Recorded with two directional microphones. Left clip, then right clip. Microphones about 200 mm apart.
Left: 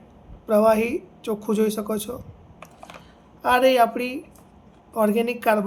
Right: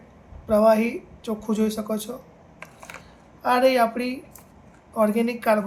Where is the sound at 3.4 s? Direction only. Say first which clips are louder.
Left 2 dB; 55° left (ahead or behind).